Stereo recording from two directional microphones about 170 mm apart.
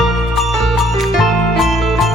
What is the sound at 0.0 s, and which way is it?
Music, centre (ahead or behind).